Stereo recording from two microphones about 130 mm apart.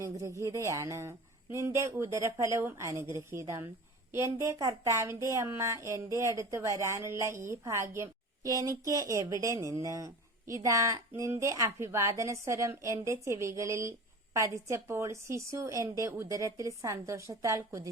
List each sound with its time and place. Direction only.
0.0 s speech: 25° right (ahead or behind)